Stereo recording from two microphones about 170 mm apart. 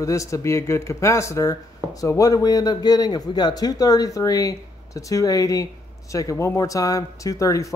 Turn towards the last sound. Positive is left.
turn(degrees=20)  # may be behind; listen again after turning